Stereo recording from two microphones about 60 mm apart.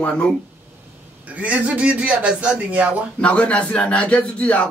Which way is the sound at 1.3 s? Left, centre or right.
Right.